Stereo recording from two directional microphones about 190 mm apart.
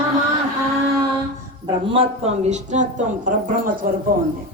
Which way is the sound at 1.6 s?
30° right (ahead or behind).